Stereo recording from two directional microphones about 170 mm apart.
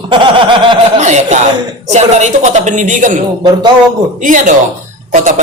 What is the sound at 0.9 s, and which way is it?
Speech, 45° right (ahead or behind).